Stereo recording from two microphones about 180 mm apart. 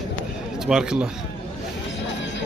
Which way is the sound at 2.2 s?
90° left.